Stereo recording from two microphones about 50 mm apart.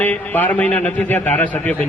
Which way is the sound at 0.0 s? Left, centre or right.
Left.